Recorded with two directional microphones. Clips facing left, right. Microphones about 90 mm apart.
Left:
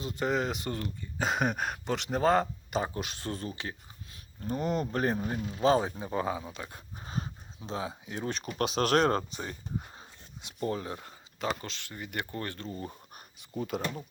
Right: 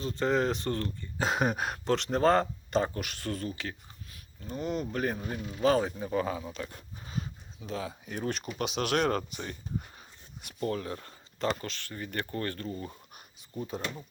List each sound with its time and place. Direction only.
0.0 s speech: 10° left (ahead or behind)
1.2 s speech: centre (ahead or behind)
2.9 s speech: 20° left (ahead or behind)
4.4 s speech: 45° left (ahead or behind)
5.1 s speech: 25° left (ahead or behind)
7.0 s a sound: 35° left (ahead or behind)
7.7 s speech: 25° left (ahead or behind)
8.2 s speech: 35° left (ahead or behind)
13.6 s speech: 90° left